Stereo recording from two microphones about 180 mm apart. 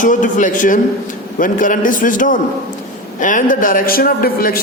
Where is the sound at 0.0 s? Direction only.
45° left (ahead or behind).